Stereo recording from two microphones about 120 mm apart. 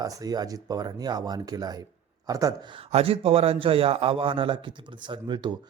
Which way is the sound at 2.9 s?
55° right (ahead or behind).